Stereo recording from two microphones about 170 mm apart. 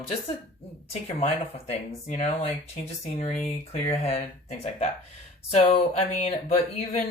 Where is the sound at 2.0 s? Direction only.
40° left (ahead or behind).